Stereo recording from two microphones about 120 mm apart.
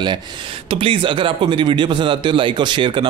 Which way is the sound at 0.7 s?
50° right (ahead or behind).